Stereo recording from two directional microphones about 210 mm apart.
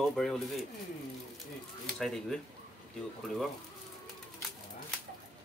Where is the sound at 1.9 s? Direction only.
Centre (ahead or behind).